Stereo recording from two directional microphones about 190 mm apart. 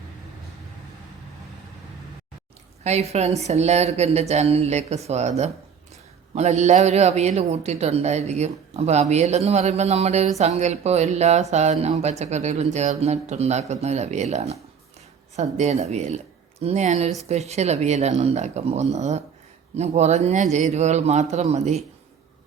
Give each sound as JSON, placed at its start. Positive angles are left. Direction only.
{"t": 2.8, "sound": "a man's voice", "side_deg": -35}
{"t": 6.3, "sound": "a man's voice", "side_deg": -35}